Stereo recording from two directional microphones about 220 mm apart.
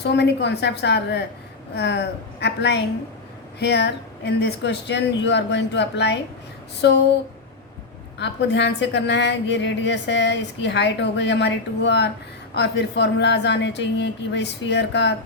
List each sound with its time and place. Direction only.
0.0 s a woman's voice: 50° left (ahead or behind)
8.2 s a woman's voice: 50° left (ahead or behind)